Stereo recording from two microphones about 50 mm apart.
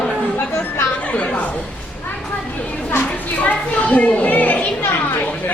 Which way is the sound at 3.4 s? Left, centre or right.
Left.